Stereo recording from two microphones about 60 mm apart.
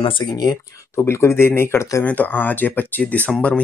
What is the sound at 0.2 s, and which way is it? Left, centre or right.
Speech, left.